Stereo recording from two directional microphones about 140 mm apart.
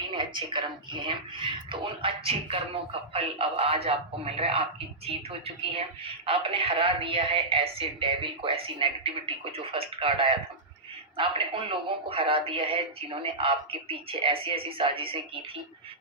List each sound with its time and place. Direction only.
0.1 s a woman's voice: 35° right (ahead or behind)